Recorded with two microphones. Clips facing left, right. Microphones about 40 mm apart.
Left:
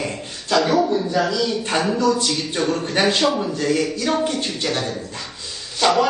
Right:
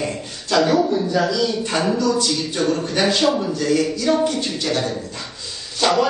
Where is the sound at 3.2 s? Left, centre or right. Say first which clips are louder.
Right 1 dB; centre.